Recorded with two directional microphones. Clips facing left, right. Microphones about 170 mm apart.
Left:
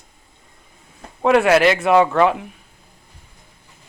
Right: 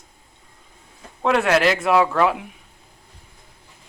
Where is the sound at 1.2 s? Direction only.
5° left (ahead or behind).